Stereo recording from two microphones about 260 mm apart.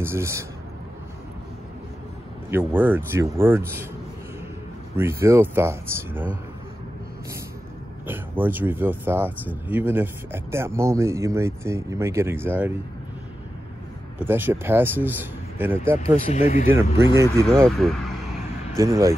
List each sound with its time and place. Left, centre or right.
0.0 s speech: centre
2.5 s speech: centre
4.9 s speech: centre
8.1 s speech: centre
14.1 s speech: centre
16.1 s speech: left
16.6 s speech: centre
17.6 s speech: centre
18.8 s speech: centre